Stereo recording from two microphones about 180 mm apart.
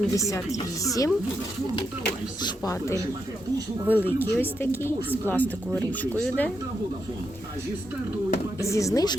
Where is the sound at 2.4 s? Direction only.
20° left (ahead or behind).